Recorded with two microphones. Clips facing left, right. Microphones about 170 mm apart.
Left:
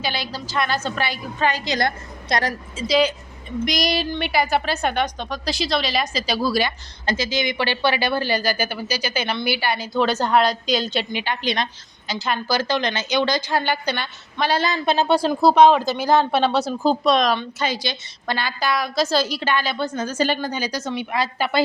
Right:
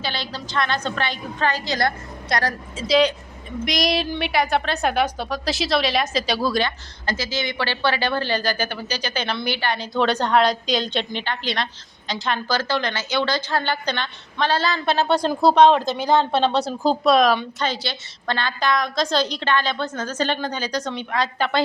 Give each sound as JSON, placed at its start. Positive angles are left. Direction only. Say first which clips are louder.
{"t": 0.0, "sound": "a woman's voice", "louder": "left 2 dB", "side_deg": 10}
{"t": 2.7, "sound": "a woman's voice", "louder": "right 1 dB", "side_deg": 0}
{"t": 12.0, "sound": "a woman's voice", "louder": "left 1 dB", "side_deg": 5}
{"t": 17.6, "sound": "a woman's voice", "louder": "left 1 dB", "side_deg": 10}